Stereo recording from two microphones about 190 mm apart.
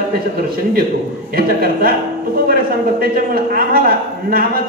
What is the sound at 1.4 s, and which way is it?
Speech, 50° right (ahead or behind).